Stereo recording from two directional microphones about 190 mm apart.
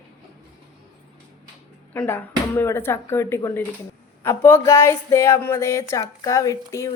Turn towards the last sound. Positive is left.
turn(degrees=15)  # may be behind; listen again after turning